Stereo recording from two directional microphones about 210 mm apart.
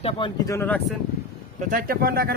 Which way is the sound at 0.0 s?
25° left (ahead or behind).